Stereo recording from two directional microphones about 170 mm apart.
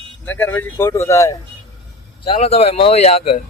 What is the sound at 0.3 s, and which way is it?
Speech, 10° left (ahead or behind).